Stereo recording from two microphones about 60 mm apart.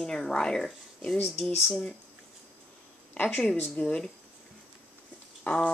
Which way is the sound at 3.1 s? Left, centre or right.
Left.